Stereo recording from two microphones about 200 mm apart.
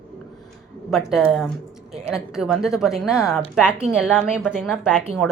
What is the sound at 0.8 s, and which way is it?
Speech, centre (ahead or behind).